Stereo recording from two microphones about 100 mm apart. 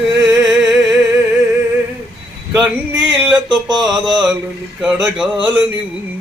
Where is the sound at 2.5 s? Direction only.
10° right (ahead or behind).